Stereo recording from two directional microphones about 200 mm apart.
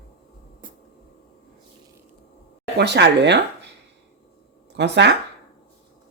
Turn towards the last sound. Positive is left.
turn(degrees=-60)  # may be behind; listen again after turning